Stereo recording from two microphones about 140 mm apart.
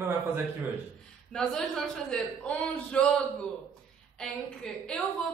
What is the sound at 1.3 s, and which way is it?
A woman's voice, 5° left (ahead or behind).